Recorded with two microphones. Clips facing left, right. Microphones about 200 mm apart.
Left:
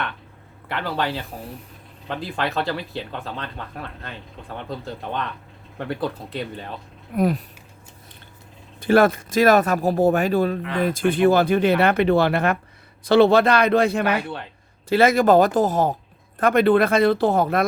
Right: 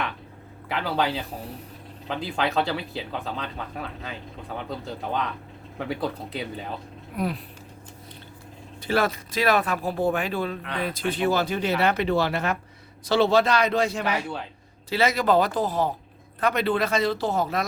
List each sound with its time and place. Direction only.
0.7 s speech: centre (ahead or behind)
7.2 s speech: 45° left (ahead or behind)
8.8 s speech: 50° left (ahead or behind)